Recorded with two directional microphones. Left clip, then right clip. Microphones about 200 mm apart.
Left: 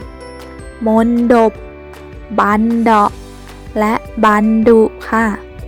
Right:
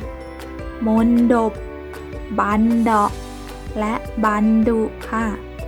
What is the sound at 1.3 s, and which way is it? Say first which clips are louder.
Music: left 7 dB; 35° left (ahead or behind).